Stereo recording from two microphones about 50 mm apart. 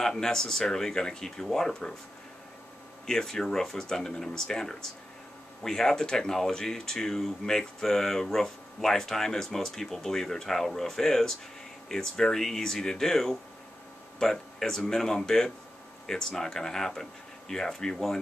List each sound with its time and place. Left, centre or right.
0.0 s speech: centre
3.1 s speech: centre